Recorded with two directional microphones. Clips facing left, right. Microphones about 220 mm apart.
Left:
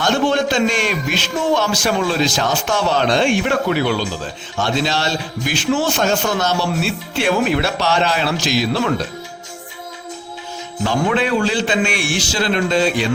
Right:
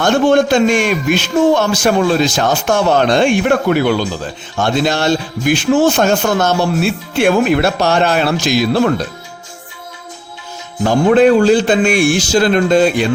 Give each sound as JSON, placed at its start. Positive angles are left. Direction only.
{"t": 0.0, "sound": "a man's voice", "side_deg": -50}
{"t": 10.8, "sound": "a man's voice", "side_deg": -45}